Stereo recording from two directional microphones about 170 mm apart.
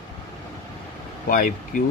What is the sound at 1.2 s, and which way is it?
Speech, 55° left (ahead or behind).